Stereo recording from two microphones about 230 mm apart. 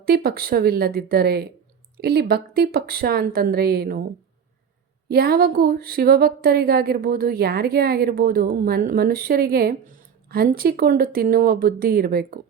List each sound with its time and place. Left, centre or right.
0.0 s speech: right
5.0 s speech: right